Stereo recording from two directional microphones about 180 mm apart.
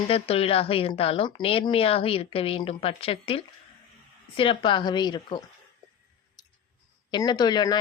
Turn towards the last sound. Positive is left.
turn(degrees=25)  # may be behind; listen again after turning